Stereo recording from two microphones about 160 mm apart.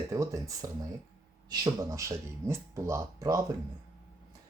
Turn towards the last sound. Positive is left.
turn(degrees=-20)  # may be behind; listen again after turning